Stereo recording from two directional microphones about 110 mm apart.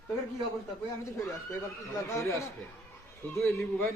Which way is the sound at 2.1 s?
25° left (ahead or behind).